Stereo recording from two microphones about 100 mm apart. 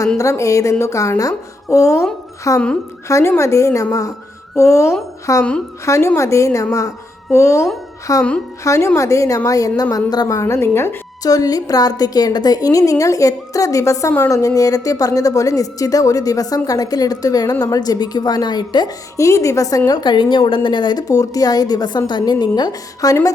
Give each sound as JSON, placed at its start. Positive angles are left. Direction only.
{"t": 0.2, "sound": "a woman's voice", "side_deg": 30}
{"t": 5.4, "sound": "a woman's voice", "side_deg": 10}
{"t": 5.8, "sound": "a woman's voice", "side_deg": 30}
{"t": 11.2, "sound": "a woman's voice", "side_deg": 40}
{"t": 19.1, "sound": "a woman's voice", "side_deg": 30}